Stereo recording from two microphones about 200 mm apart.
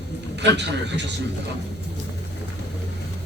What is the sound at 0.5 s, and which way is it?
Speech, 60° right (ahead or behind).